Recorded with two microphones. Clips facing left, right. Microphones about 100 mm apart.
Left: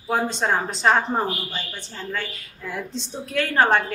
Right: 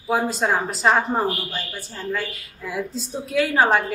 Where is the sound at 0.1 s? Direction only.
5° right (ahead or behind).